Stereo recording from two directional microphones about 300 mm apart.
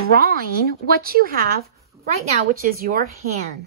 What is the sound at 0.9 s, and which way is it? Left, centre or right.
A woman's voice, right.